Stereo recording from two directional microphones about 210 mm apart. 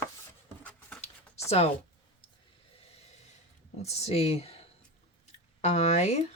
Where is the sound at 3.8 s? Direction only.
30° left (ahead or behind).